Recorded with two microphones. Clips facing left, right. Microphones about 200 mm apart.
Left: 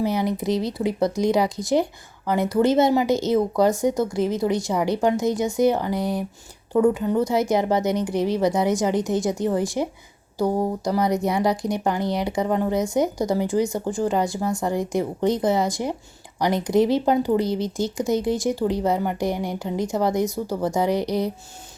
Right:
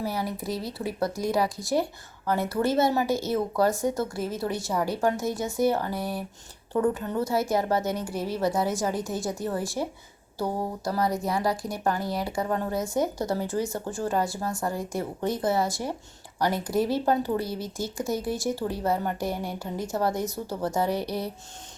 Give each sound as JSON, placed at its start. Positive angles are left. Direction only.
{"t": 0.0, "sound": "speech", "side_deg": 20}